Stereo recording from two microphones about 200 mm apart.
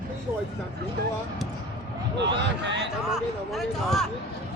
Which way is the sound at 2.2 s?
60° right (ahead or behind).